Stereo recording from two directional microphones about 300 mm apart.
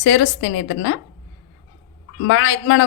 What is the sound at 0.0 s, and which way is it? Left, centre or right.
Speech, left.